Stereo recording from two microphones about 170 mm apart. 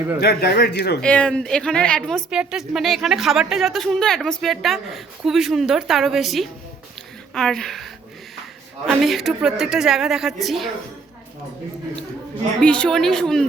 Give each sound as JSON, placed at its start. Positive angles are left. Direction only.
{"t": 0.2, "sound": "speech", "side_deg": 65}
{"t": 1.0, "sound": "a woman's voice", "side_deg": 5}
{"t": 8.9, "sound": "a woman's voice", "side_deg": 0}
{"t": 12.6, "sound": "a woman's voice", "side_deg": 5}